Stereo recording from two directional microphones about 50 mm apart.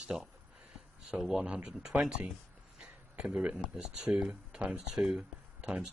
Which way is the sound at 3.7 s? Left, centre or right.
Centre.